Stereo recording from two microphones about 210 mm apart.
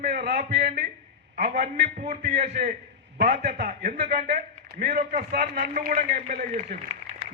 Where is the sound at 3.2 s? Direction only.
50° right (ahead or behind).